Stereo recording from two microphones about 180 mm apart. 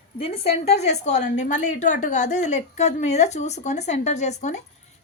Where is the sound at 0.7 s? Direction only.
40° left (ahead or behind).